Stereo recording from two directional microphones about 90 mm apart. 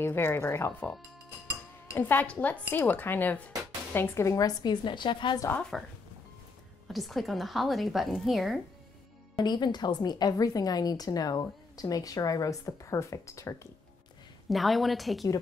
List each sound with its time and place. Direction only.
0.0 s speech: 25° left (ahead or behind)
2.0 s speech: 20° left (ahead or behind)
4.3 s a woman's voice: 40° left (ahead or behind)
4.8 s a woman's voice: 60° left (ahead or behind)
5.6 s a woman's voice: 5° left (ahead or behind)
6.9 s a woman's voice: centre (ahead or behind)
9.4 s a woman's voice: 55° left (ahead or behind); by 13.7 s 35° left (ahead or behind)
14.5 s a woman's voice: centre (ahead or behind)